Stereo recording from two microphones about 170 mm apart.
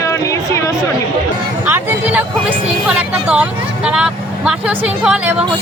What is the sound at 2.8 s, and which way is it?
Speech, 5° right (ahead or behind).